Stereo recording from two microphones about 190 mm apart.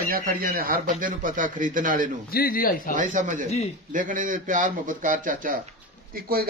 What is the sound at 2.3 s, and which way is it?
Speech, 50° left (ahead or behind).